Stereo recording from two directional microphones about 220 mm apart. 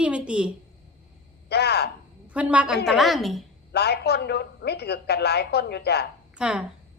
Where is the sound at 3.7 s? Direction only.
45° left (ahead or behind).